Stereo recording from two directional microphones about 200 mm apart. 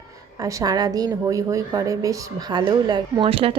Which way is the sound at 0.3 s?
15° right (ahead or behind).